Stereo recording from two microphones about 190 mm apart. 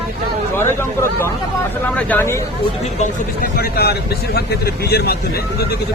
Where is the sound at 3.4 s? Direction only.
55° left (ahead or behind).